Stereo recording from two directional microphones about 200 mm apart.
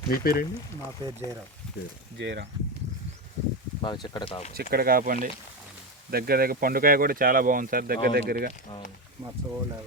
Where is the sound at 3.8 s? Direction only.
20° left (ahead or behind).